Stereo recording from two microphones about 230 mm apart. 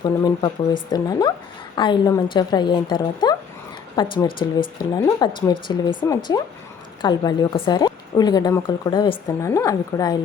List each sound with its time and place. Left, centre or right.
0.0 s a woman's voice: centre